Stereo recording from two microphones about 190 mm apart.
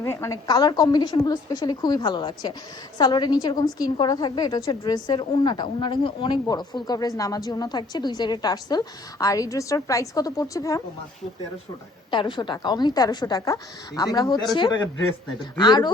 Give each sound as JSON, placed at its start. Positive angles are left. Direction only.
{"t": 0.0, "sound": "a woman's voice", "side_deg": 15}
{"t": 12.1, "sound": "a woman's voice", "side_deg": 25}